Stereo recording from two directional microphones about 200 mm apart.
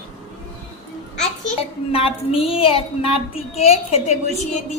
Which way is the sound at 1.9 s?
30° left (ahead or behind).